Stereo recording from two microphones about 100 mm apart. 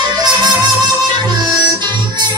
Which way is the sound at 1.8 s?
50° right (ahead or behind).